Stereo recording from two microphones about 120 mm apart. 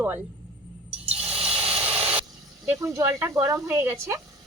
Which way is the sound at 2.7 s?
25° right (ahead or behind).